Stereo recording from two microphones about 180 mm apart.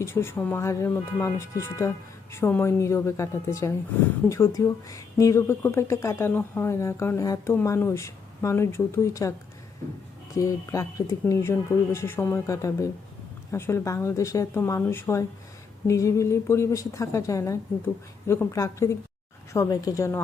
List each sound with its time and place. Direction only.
0.0 s a woman's voice: 15° left (ahead or behind)
10.3 s a woman's voice: 15° left (ahead or behind)